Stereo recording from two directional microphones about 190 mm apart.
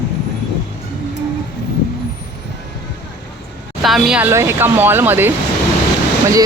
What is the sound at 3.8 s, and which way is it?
Speech, centre (ahead or behind).